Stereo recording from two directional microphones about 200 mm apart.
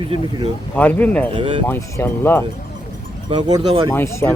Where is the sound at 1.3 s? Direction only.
25° right (ahead or behind).